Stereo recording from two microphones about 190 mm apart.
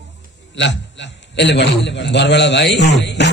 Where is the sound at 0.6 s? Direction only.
70° left (ahead or behind).